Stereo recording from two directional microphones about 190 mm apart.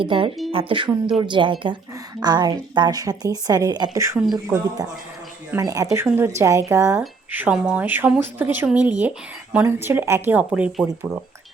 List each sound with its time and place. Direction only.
0.0 s a woman's voice: 25° right (ahead or behind); by 10.8 s 5° right (ahead or behind)